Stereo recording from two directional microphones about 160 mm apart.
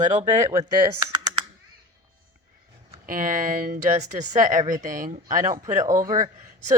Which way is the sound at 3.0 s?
60° right (ahead or behind).